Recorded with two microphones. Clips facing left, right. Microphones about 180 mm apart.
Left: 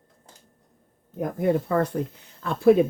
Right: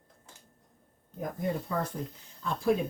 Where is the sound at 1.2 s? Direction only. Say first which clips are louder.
Left 9 dB; 65° left (ahead or behind).